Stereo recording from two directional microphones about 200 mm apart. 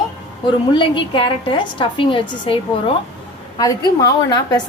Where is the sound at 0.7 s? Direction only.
25° left (ahead or behind).